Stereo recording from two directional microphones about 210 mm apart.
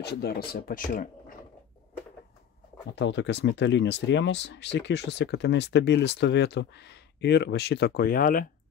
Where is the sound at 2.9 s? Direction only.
55° left (ahead or behind).